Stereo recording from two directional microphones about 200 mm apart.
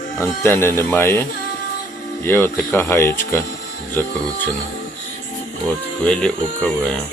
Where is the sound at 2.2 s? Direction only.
10° left (ahead or behind).